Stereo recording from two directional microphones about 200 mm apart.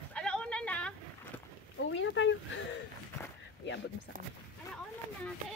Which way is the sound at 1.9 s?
70° left (ahead or behind).